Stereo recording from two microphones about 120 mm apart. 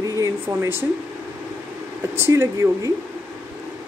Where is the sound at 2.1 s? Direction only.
20° right (ahead or behind).